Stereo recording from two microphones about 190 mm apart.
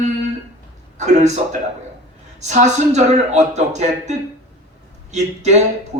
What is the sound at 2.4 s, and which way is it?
A man's voice, 35° right (ahead or behind).